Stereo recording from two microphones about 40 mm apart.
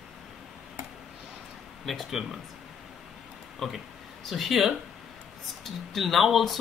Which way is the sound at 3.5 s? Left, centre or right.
Centre.